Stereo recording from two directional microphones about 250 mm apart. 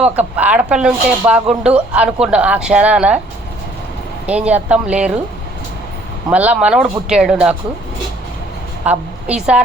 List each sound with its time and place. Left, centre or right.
0.0 s speech: centre
4.3 s speech: centre
6.3 s speech: centre
8.8 s a woman's voice: centre